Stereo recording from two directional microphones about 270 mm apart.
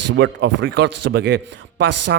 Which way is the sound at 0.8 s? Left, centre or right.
Right.